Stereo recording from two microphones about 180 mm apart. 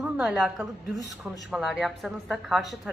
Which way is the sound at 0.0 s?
Centre (ahead or behind).